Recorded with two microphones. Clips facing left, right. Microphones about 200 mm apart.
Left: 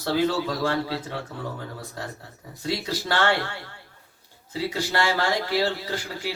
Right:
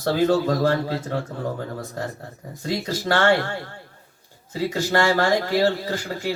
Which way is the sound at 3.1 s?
45° right (ahead or behind).